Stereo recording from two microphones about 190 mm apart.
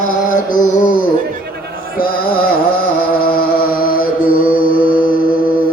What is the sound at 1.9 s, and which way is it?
Music, 50° left (ahead or behind).